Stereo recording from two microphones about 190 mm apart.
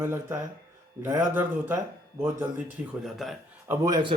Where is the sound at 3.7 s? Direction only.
20° right (ahead or behind).